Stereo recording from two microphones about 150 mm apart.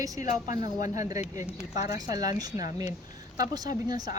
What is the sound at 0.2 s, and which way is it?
Speech, 55° left (ahead or behind).